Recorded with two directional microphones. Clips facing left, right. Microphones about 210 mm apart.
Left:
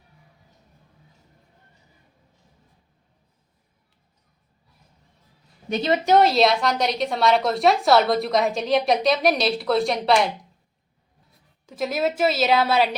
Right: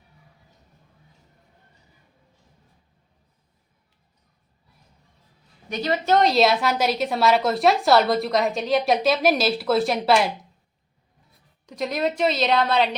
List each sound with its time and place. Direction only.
5.6 s a woman's voice: 25° left (ahead or behind)
6.1 s a woman's voice: 5° left (ahead or behind)
11.6 s a woman's voice: 5° left (ahead or behind)